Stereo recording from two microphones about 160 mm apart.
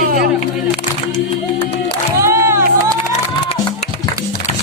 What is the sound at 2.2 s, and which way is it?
Crowd, 15° right (ahead or behind).